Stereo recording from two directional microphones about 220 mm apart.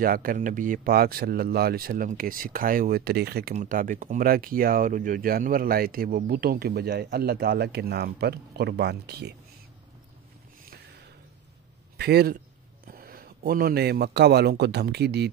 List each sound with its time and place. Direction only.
0.0 s speech: 40° right (ahead or behind)
12.0 s a man's voice: 45° right (ahead or behind)